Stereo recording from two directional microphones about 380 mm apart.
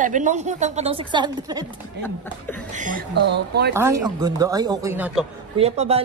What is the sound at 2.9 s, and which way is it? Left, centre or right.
Speech, right.